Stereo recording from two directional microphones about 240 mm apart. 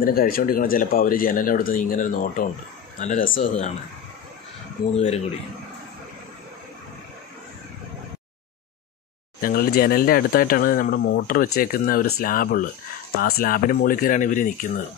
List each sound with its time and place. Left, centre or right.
0.0 s speech: left
4.9 s speech: left
9.4 s speech: left